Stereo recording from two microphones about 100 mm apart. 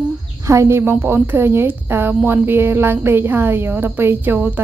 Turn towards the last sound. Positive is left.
turn(degrees=-20)  # may be behind; listen again after turning